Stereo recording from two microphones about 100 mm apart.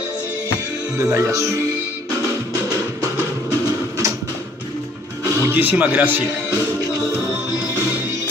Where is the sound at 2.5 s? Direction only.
35° right (ahead or behind).